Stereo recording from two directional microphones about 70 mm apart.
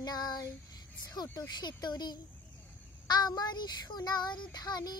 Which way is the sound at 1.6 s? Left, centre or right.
Left.